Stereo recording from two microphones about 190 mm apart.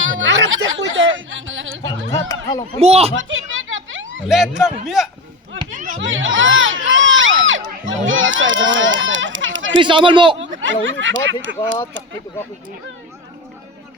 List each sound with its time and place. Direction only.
0.0 s a sound: 85° right
1.8 s speech: 15° left (ahead or behind)
2.7 s speech: 30° right (ahead or behind)
3.2 s a sound: 90° right
4.3 s speech: centre (ahead or behind)
5.7 s a sound: 45° right (ahead or behind)
6.0 s crowd: 90° right
7.9 s a child's voice: 90° right
9.7 s speech: 25° right (ahead or behind)
10.6 s speech: 85° right